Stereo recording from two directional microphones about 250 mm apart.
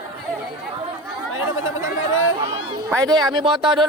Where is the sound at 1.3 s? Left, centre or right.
Left.